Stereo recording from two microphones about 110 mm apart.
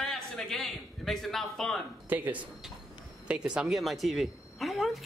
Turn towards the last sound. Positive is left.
turn(degrees=0)  # may be behind; listen again after turning